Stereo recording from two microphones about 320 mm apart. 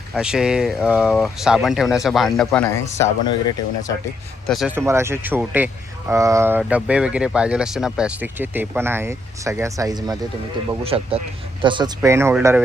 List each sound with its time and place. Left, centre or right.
0.1 s speech: centre
4.4 s speech: centre